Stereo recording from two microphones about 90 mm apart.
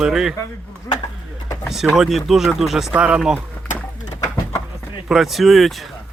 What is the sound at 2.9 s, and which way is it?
Speech, 15° right (ahead or behind).